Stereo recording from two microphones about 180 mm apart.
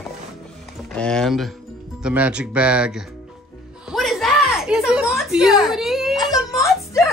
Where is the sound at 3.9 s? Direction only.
Centre (ahead or behind).